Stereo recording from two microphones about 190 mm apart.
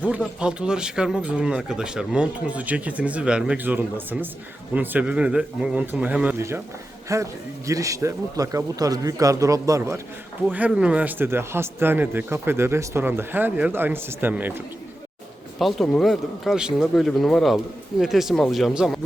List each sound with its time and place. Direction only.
0.3 s speech: 5° right (ahead or behind)
15.5 s speech: centre (ahead or behind)